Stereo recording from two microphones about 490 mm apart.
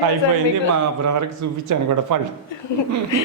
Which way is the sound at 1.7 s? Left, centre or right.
Right.